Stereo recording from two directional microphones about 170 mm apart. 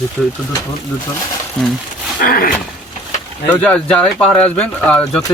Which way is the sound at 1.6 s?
5° left (ahead or behind).